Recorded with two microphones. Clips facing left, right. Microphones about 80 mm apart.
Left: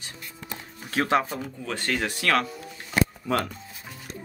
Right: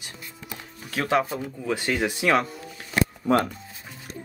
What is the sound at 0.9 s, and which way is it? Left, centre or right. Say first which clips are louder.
Speech: even; centre.